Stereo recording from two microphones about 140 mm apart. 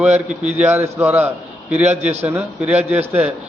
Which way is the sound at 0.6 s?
10° right (ahead or behind).